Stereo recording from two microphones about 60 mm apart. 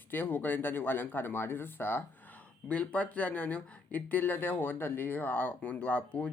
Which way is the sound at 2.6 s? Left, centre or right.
Centre.